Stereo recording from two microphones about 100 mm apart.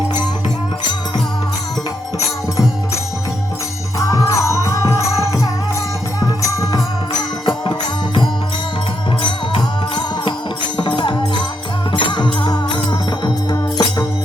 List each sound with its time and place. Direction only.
3.9 s music: 30° left (ahead or behind)
7.4 s music: 55° left (ahead or behind)
9.5 s music: 60° left (ahead or behind); by 13.8 s 45° left (ahead or behind)